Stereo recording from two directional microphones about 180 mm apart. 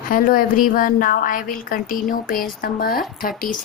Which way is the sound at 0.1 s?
50° left (ahead or behind).